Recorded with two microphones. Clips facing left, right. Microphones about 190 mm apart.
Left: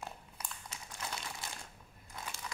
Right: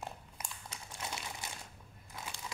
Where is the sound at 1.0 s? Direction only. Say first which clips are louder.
Even; 20° right (ahead or behind).